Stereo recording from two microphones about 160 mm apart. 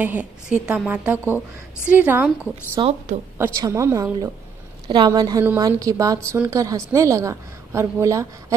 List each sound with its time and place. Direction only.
0.0 s a woman's voice: 10° right (ahead or behind)
2.8 s a woman's voice: 40° right (ahead or behind)
3.3 s a woman's voice: 15° right (ahead or behind)